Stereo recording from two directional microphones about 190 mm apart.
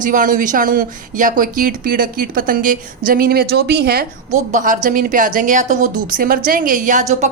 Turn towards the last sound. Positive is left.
turn(degrees=-40)  # may be behind; listen again after turning